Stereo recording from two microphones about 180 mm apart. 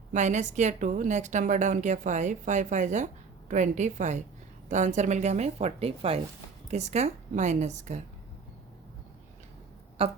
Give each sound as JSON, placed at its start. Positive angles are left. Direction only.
{"t": 0.1, "sound": "a woman's voice", "side_deg": -40}
{"t": 10.0, "sound": "speech", "side_deg": -35}